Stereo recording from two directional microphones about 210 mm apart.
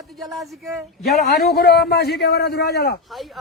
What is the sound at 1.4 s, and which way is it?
A man's voice, 45° left (ahead or behind).